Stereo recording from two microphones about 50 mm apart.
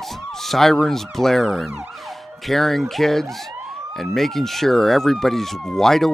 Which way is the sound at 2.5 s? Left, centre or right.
Centre.